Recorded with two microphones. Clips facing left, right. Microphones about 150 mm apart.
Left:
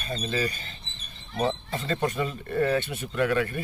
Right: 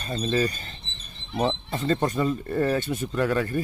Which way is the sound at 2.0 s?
40° right (ahead or behind).